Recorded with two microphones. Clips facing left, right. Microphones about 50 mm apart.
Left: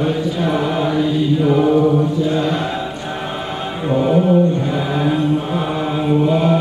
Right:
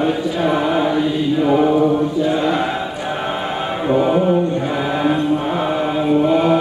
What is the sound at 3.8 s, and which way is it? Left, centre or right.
Mantra, centre.